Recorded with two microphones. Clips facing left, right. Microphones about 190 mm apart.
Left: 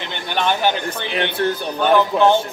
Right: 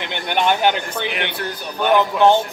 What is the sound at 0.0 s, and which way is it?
Speech, 15° right (ahead or behind).